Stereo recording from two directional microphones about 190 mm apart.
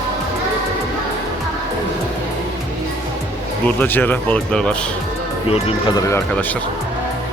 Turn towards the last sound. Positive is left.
turn(degrees=10)  # may be behind; listen again after turning